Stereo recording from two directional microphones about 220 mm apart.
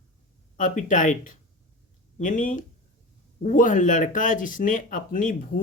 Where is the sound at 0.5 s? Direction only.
35° left (ahead or behind).